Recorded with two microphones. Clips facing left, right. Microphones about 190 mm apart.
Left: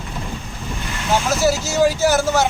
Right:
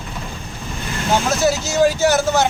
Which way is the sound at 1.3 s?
5° left (ahead or behind).